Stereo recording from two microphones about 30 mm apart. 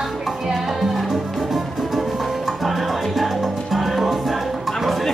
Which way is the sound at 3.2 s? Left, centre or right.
Centre.